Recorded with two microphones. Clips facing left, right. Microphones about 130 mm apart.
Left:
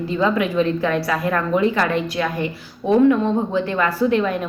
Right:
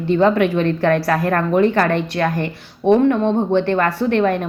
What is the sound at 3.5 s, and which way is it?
Speech, 60° right (ahead or behind).